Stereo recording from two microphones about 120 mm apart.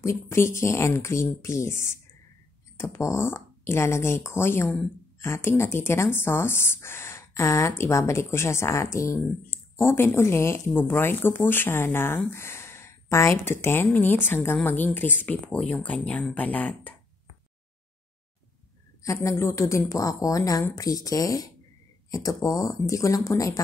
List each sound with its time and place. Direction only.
0.0 s speech: 25° left (ahead or behind)
19.2 s speech: 25° left (ahead or behind)